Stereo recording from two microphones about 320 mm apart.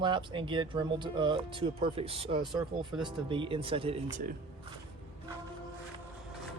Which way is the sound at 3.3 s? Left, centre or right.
Centre.